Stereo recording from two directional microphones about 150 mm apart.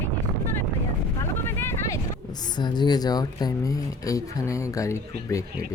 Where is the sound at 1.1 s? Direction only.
15° left (ahead or behind).